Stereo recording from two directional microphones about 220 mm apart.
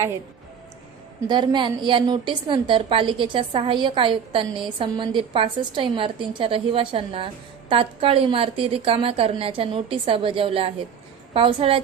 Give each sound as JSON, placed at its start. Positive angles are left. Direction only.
{"t": 1.3, "sound": "a woman's voice", "side_deg": -20}